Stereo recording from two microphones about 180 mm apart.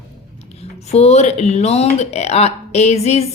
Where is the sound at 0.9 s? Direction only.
35° left (ahead or behind).